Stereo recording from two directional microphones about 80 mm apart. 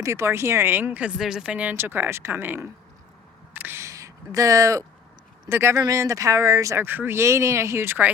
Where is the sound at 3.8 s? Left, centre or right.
Right.